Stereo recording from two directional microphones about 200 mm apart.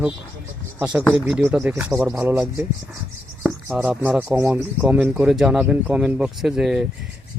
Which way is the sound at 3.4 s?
10° right (ahead or behind).